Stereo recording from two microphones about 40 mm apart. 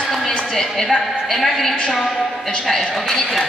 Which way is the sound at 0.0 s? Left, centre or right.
Centre.